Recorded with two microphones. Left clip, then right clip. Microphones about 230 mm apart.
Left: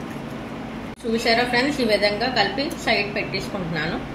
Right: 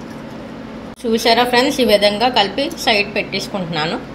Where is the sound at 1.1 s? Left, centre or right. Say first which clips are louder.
Right 6 dB; right.